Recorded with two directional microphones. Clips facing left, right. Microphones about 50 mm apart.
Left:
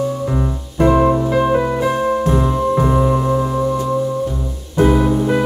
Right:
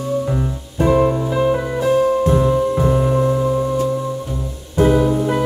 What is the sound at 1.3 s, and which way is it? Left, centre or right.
Music, left.